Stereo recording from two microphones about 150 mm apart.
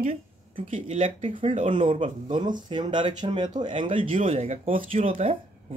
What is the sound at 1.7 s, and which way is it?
Speech, 35° right (ahead or behind).